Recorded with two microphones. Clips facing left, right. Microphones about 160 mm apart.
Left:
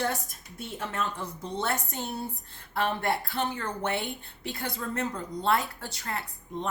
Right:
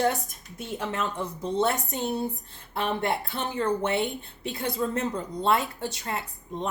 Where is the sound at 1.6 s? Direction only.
20° right (ahead or behind).